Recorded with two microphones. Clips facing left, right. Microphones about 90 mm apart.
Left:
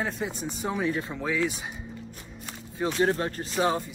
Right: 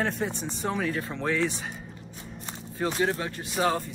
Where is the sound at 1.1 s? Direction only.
5° left (ahead or behind).